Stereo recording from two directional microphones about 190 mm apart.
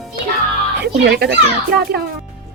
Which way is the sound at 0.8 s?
60° right (ahead or behind).